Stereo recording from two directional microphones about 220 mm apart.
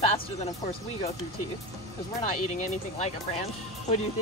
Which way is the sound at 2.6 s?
30° left (ahead or behind).